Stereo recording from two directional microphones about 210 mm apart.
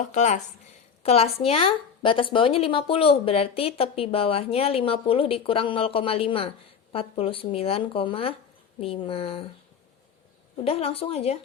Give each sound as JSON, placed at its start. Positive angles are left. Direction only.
{"t": 0.0, "sound": "a woman's voice", "side_deg": 35}
{"t": 10.6, "sound": "speech", "side_deg": 30}